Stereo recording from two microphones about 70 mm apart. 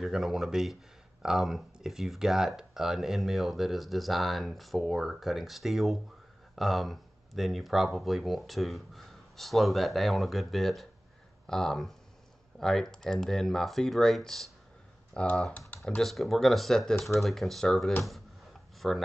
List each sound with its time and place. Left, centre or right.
0.0 s speech: centre
15.1 s speech: centre
16.0 s speech: centre